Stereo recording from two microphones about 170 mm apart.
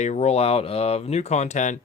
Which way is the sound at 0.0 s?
40° left (ahead or behind).